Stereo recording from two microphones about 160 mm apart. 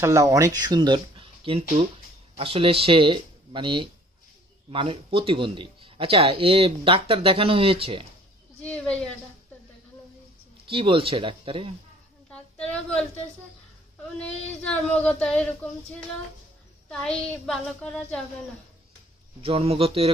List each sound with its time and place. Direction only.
0.0 s speech: 20° right (ahead or behind); by 8.0 s 35° right (ahead or behind)
8.6 s a woman's voice: 5° left (ahead or behind)
10.7 s speech: 35° right (ahead or behind)
12.3 s a sound: 5° left (ahead or behind)
14.2 s child singing: 10° left (ahead or behind)
16.9 s a woman's voice: 5° left (ahead or behind)
19.4 s speech: 35° right (ahead or behind)